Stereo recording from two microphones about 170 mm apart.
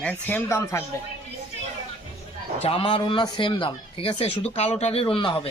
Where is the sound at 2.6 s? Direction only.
30° left (ahead or behind).